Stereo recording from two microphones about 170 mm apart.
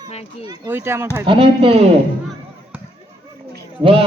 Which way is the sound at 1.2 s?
30° right (ahead or behind).